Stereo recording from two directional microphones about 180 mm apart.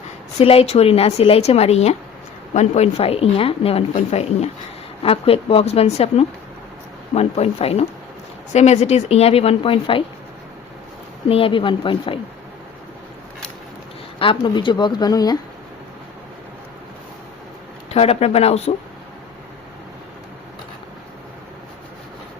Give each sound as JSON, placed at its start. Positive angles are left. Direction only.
{"t": 0.3, "sound": "a woman's voice", "side_deg": 35}
{"t": 11.3, "sound": "speech", "side_deg": 30}
{"t": 14.2, "sound": "speech", "side_deg": 25}
{"t": 17.9, "sound": "a woman's voice", "side_deg": 35}